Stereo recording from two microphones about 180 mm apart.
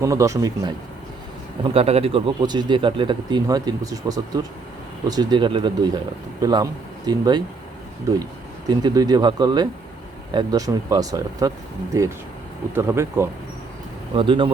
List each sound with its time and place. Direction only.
0.0 s speech: 15° right (ahead or behind)
1.6 s speech: 35° right (ahead or behind)
8.6 s speech: 20° right (ahead or behind)
14.2 s speech: 30° right (ahead or behind)